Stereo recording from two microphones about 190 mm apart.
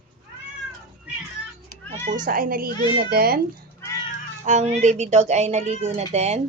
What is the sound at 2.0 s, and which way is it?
Speech, 45° right (ahead or behind).